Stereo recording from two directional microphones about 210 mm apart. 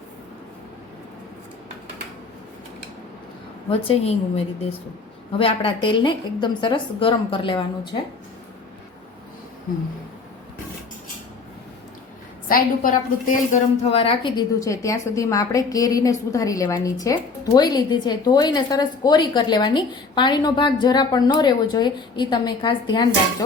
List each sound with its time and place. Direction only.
3.7 s a woman's voice: 25° left (ahead or behind)
5.4 s a woman's voice: 25° left (ahead or behind)
12.5 s a woman's voice: 40° left (ahead or behind); by 23.0 s 20° left (ahead or behind)